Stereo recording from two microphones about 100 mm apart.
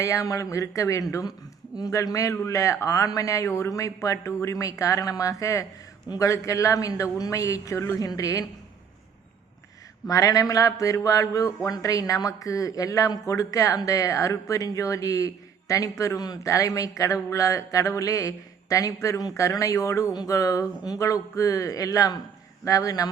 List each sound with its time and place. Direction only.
0.0 s speech: 30° left (ahead or behind)
10.1 s speech: 35° left (ahead or behind)